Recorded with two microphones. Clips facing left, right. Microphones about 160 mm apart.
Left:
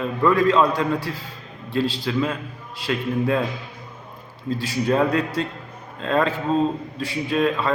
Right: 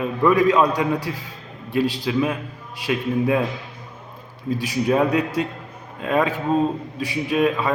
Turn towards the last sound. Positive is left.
turn(degrees=-15)  # may be behind; listen again after turning